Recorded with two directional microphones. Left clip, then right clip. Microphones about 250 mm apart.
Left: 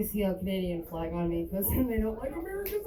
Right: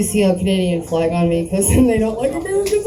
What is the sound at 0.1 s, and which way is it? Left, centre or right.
Speech, left.